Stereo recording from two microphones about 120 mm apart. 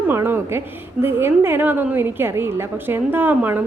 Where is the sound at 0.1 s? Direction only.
20° right (ahead or behind).